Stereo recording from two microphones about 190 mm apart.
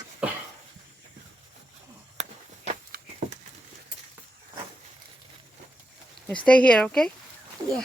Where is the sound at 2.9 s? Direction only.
50° right (ahead or behind).